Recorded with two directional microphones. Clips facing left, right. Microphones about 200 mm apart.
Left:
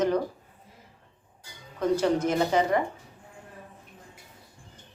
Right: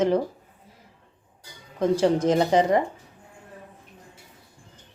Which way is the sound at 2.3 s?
25° right (ahead or behind).